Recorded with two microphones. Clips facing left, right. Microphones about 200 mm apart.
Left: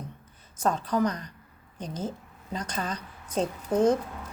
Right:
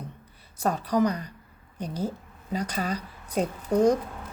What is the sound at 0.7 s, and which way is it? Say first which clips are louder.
A woman's voice: right 2 dB; 10° right (ahead or behind).